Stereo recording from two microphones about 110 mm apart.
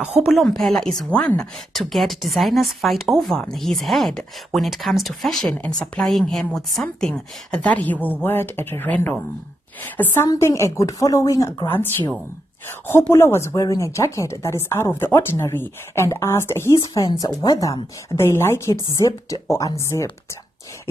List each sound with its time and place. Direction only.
0.3 s a woman's voice: centre (ahead or behind); by 11.9 s 25° left (ahead or behind)
13.1 s a woman's voice: 20° left (ahead or behind)